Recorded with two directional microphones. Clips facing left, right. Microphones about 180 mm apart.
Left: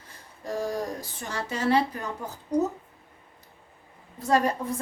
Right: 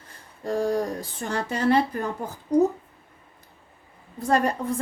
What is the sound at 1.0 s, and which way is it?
A woman's voice, 55° right (ahead or behind).